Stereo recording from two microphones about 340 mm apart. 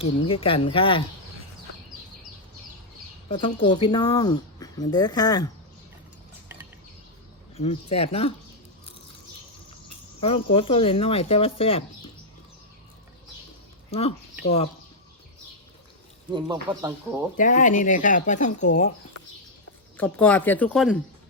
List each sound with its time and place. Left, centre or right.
0.0 s speech: centre
3.2 s speech: centre
7.5 s speech: centre
10.2 s speech: centre
16.3 s speech: centre
17.3 s speech: left
20.0 s speech: centre